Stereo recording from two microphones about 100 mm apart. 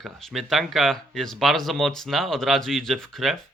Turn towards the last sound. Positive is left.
turn(degrees=5)  # may be behind; listen again after turning